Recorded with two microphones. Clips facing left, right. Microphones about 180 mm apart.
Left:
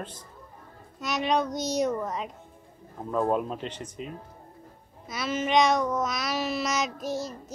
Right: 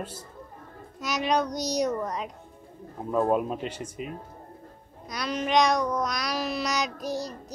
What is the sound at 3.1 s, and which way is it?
Speech, 10° right (ahead or behind).